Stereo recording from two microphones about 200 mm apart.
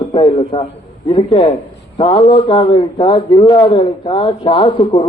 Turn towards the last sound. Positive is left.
turn(degrees=25)  # may be behind; listen again after turning